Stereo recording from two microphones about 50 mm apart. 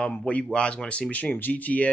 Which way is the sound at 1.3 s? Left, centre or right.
Left.